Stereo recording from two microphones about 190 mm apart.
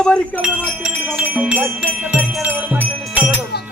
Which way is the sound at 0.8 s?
5° right (ahead or behind).